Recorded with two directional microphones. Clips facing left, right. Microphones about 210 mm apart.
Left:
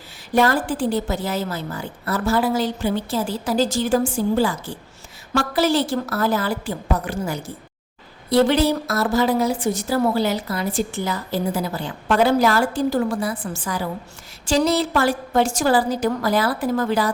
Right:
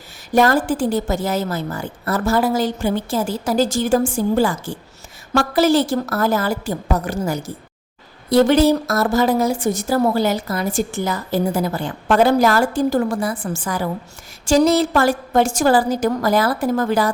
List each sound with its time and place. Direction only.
0.3 s a woman's voice: 45° right (ahead or behind)